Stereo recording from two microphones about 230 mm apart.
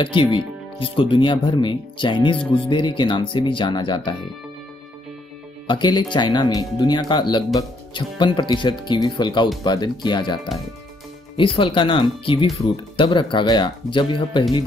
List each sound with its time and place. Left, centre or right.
0.0 s speech: left
5.7 s speech: centre